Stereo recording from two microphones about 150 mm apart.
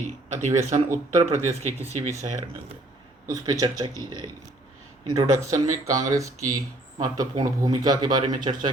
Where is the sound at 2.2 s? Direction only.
50° right (ahead or behind).